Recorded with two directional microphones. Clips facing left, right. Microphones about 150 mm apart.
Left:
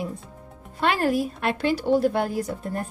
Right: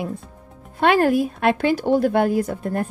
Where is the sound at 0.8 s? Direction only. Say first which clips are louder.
Right 6 dB; 55° right (ahead or behind).